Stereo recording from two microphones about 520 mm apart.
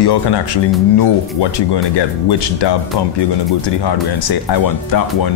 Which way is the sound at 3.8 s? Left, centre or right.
Left.